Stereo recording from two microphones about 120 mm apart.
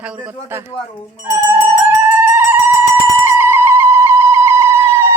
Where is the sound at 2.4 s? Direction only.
20° right (ahead or behind).